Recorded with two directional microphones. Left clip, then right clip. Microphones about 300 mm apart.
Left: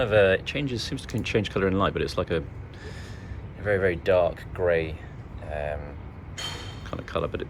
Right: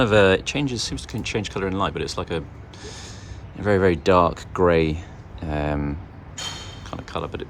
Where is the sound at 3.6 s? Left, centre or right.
Centre.